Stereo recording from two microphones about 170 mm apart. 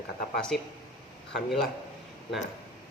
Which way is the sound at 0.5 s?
Centre (ahead or behind).